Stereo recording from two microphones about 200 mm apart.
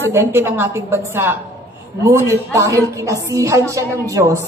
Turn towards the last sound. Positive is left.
turn(degrees=-15)  # may be behind; listen again after turning